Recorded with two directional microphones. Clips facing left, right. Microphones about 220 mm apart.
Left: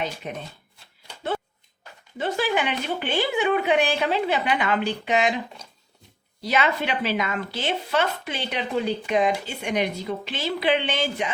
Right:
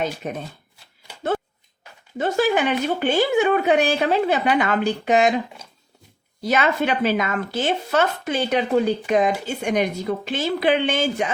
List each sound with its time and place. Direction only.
0.2 s speech: 45° right (ahead or behind)
2.1 s speech: 45° right (ahead or behind)
6.4 s speech: 45° right (ahead or behind)